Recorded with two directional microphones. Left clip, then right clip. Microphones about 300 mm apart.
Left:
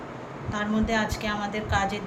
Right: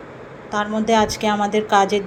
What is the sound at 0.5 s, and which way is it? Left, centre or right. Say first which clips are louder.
A woman's voice: right 9 dB; centre.